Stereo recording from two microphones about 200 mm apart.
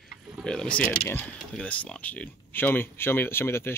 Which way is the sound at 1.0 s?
10° left (ahead or behind).